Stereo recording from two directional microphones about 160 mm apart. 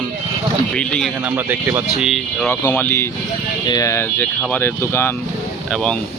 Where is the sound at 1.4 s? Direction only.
10° right (ahead or behind).